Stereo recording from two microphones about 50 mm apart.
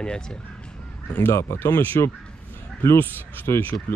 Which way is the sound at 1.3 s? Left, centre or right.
Left.